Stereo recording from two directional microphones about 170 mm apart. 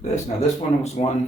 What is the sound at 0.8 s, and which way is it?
Speech, 40° left (ahead or behind).